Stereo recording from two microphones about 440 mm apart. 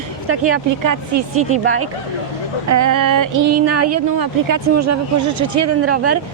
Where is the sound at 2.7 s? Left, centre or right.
Right.